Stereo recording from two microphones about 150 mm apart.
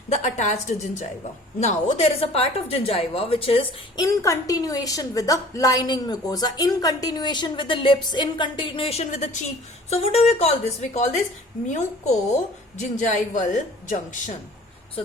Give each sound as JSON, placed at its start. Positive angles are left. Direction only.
{"t": 0.1, "sound": "a woman's voice", "side_deg": 50}
{"t": 4.0, "sound": "a woman's voice", "side_deg": 20}
{"t": 12.7, "sound": "speech", "side_deg": 50}